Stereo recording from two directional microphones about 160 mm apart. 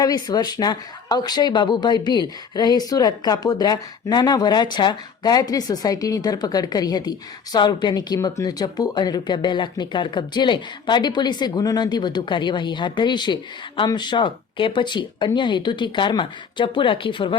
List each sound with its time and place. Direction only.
0.0 s speech: 25° left (ahead or behind)